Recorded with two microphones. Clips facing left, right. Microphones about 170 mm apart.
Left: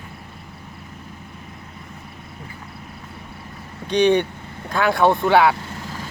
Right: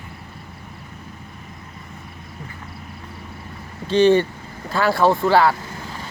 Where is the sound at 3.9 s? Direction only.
15° left (ahead or behind).